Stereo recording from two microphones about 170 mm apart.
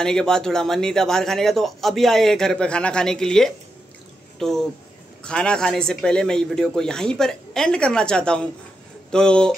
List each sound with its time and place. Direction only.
0.0 s a man's voice: 5° left (ahead or behind)